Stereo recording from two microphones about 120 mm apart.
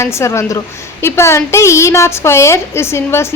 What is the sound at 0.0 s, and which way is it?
A woman's voice, 25° left (ahead or behind).